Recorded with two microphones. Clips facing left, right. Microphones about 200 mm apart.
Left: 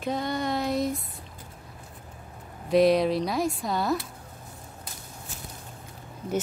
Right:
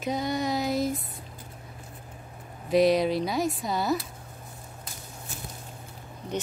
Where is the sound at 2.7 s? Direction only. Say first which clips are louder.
Left 1 dB; centre (ahead or behind).